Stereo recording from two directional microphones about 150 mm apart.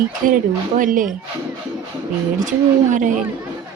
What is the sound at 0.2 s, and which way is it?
Speech, 65° right (ahead or behind).